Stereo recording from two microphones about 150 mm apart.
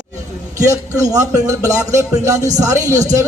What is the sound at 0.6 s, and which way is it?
Speech, 20° right (ahead or behind).